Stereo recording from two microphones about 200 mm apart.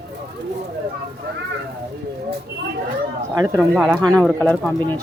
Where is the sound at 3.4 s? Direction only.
20° right (ahead or behind).